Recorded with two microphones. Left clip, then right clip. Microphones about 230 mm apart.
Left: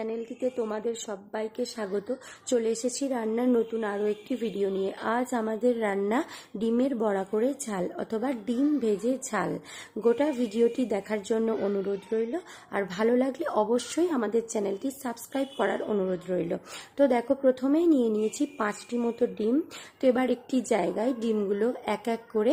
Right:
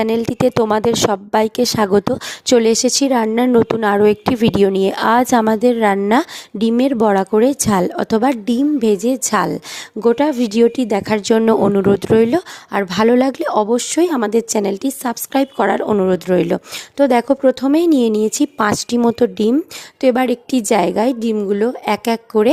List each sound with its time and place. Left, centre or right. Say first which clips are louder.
0.0 s a woman's voice: right 15 dB; right